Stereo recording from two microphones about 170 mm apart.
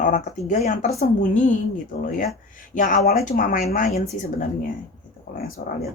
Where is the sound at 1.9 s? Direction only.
60° left (ahead or behind).